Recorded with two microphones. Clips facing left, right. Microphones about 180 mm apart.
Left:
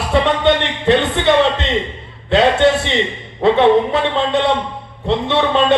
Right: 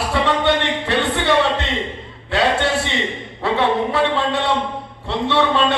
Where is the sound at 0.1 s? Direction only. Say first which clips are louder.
Left 5 dB; 20° left (ahead or behind).